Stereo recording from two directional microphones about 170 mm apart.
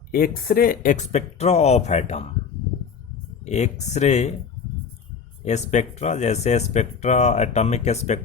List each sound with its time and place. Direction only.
0.1 s speech: 60° left (ahead or behind); by 2.2 s 40° left (ahead or behind)
3.4 s speech: 40° left (ahead or behind)
5.5 s speech: 40° left (ahead or behind)